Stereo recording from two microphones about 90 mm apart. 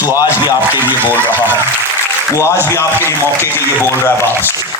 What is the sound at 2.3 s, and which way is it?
Speech, 35° left (ahead or behind).